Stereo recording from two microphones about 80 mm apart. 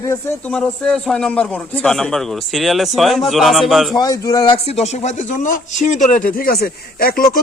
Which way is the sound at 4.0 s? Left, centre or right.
Left.